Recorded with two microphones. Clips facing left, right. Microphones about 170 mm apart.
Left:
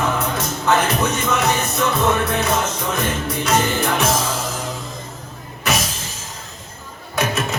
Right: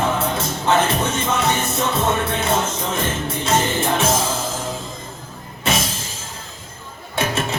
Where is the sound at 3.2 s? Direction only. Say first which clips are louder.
Left 1 dB; 25° right (ahead or behind).